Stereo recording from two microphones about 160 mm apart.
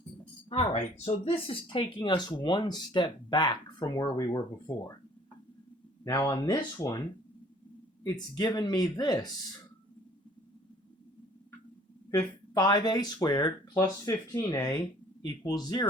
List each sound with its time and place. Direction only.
0.5 s speech: 40° left (ahead or behind)
6.1 s speech: 25° left (ahead or behind)
8.0 s speech: 25° left (ahead or behind)
12.1 s speech: 25° left (ahead or behind)